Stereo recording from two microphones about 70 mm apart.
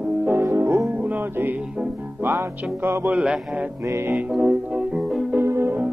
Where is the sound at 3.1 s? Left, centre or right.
Centre.